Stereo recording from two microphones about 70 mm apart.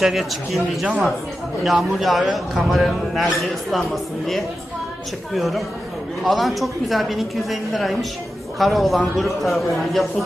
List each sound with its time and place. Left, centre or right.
0.0 s a man's voice: centre
5.3 s a man's voice: centre